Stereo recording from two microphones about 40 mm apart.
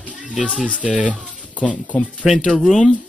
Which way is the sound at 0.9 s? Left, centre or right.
Right.